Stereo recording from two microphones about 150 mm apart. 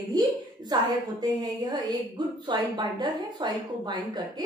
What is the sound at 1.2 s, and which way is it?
A woman's voice, 30° right (ahead or behind).